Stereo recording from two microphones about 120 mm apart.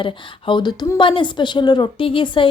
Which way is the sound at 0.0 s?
45° left (ahead or behind).